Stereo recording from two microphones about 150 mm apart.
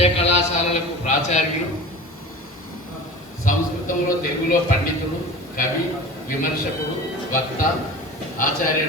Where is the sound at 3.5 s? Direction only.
65° left (ahead or behind).